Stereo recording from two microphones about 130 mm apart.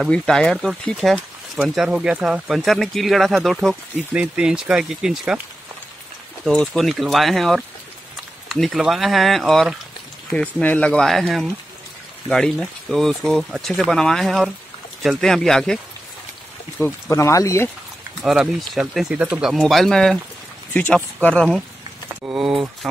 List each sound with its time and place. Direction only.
0.0 s speech: 5° left (ahead or behind)
6.4 s speech: 5° left (ahead or behind)
10.3 s speech: 10° left (ahead or behind)
16.8 s speech: 25° left (ahead or behind)
18.2 s speech: 5° right (ahead or behind)
19.6 s speech: 5° left (ahead or behind)
22.3 s speech: 5° right (ahead or behind)